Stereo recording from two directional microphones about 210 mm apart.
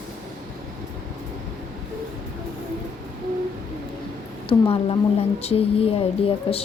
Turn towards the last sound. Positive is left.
turn(degrees=25)  # may be behind; listen again after turning